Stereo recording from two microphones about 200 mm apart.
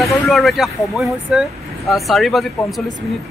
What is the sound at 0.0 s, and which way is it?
Speech, centre (ahead or behind).